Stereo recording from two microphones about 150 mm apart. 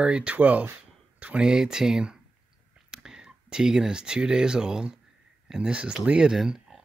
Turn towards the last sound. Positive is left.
turn(degrees=0)  # may be behind; listen again after turning